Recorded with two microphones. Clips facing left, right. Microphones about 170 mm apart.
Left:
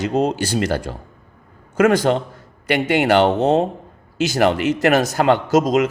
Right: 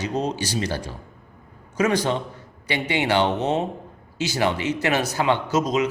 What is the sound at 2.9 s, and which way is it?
Speech, 45° left (ahead or behind).